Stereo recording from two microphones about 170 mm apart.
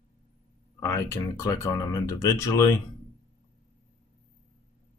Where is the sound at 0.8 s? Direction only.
15° left (ahead or behind).